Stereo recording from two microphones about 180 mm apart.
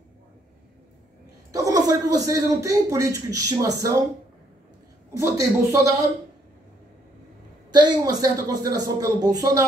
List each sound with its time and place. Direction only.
1.5 s a man's voice: 20° right (ahead or behind)
5.1 s speech: 15° right (ahead or behind)
7.7 s a man's voice: 25° right (ahead or behind)